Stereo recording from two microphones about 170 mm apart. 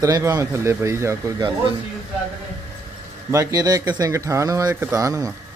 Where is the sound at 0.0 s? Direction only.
20° right (ahead or behind).